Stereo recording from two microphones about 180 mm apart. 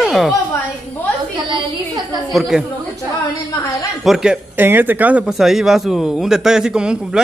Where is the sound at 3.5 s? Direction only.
20° left (ahead or behind).